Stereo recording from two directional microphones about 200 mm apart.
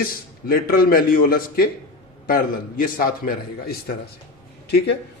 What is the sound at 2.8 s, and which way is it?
A man's voice, 45° left (ahead or behind).